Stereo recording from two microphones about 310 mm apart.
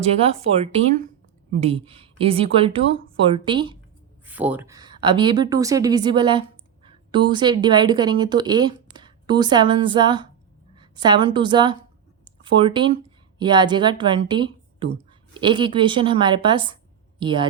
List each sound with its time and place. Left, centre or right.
0.0 s speech: centre
4.3 s a woman's voice: centre